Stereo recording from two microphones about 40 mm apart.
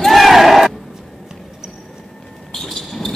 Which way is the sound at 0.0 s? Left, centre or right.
Centre.